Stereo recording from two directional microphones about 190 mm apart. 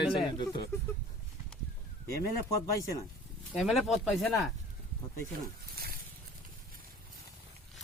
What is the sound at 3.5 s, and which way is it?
Speech, centre (ahead or behind).